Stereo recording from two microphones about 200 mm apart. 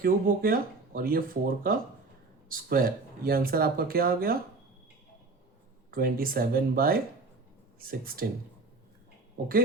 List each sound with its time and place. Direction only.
0.0 s speech: 45° right (ahead or behind)
5.9 s speech: 45° right (ahead or behind)